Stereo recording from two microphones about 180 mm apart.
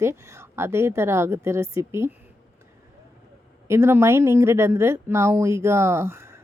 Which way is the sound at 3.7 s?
15° right (ahead or behind).